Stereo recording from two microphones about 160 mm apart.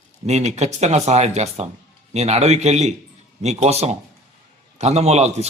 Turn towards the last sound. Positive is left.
turn(degrees=-45)  # may be behind; listen again after turning